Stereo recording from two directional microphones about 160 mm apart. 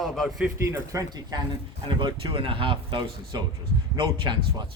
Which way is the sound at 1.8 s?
30° right (ahead or behind).